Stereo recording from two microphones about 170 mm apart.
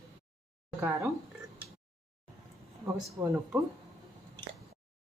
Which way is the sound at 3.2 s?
10° right (ahead or behind).